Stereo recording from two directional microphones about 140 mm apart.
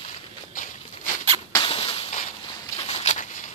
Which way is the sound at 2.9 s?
55° left (ahead or behind).